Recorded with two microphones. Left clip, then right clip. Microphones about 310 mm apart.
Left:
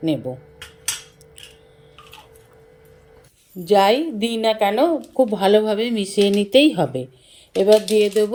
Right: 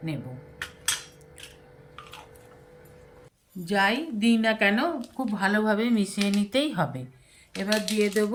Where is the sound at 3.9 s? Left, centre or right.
Left.